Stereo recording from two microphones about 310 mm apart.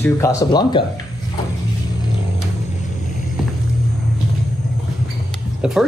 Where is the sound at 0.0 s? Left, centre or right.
Centre.